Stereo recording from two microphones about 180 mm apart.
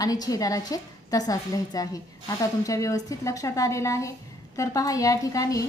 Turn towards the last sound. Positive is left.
turn(degrees=20)  # may be behind; listen again after turning